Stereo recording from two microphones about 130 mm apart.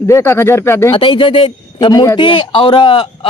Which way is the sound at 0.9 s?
40° left (ahead or behind).